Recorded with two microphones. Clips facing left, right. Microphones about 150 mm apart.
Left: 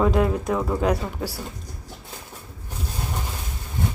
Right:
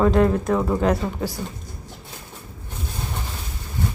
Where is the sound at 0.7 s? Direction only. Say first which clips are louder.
Right 2 dB; 10° left (ahead or behind).